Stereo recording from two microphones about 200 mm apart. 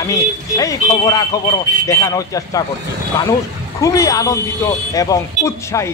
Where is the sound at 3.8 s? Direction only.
15° left (ahead or behind).